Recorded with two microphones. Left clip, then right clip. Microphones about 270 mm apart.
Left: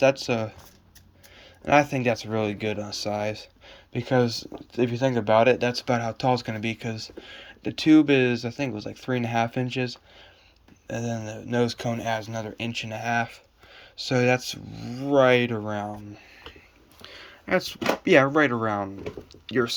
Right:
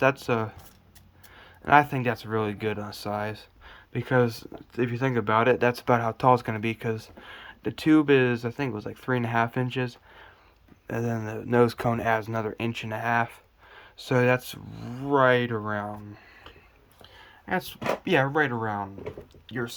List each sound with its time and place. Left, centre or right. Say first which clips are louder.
0.0 s speech: left 2 dB; centre
1.6 s speech: even; centre
17.2 s speech: left 5 dB; centre